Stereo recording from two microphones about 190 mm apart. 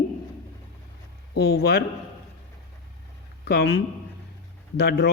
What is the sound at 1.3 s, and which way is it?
Speech, 55° left (ahead or behind).